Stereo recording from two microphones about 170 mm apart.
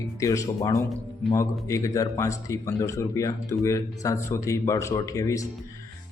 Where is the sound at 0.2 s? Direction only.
20° left (ahead or behind).